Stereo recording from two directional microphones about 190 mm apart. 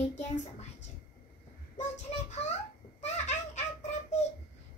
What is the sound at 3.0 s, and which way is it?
Baby laughter, 35° left (ahead or behind).